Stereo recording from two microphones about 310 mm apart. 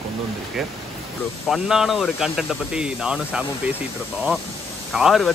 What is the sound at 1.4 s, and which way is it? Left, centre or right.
Speech, centre.